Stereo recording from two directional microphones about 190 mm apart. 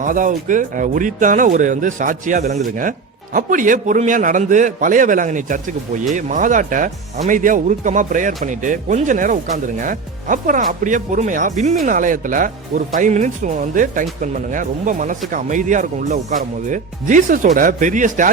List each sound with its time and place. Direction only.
0.0 s speech: 45° right (ahead or behind)